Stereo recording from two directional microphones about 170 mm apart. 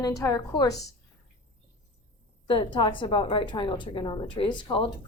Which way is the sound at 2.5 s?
30° left (ahead or behind).